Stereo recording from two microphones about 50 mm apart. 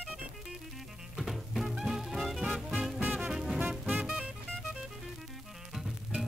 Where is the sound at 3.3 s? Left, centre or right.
Centre.